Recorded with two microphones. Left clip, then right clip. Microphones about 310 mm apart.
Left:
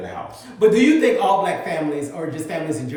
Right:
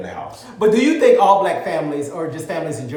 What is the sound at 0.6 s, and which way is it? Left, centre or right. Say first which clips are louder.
Speech: right 1 dB; centre.